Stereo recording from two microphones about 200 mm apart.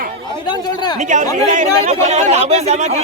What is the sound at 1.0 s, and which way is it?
Speech, 35° right (ahead or behind).